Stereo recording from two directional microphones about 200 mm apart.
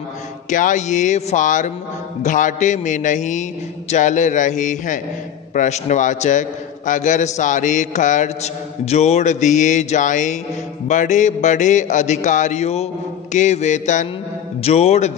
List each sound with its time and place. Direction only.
0.5 s a man's voice: 40° left (ahead or behind)